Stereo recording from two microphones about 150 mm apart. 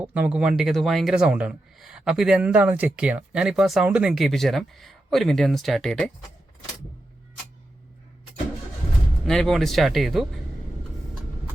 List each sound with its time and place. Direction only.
0.1 s speech: 5° right (ahead or behind)
9.2 s speech: 5° left (ahead or behind)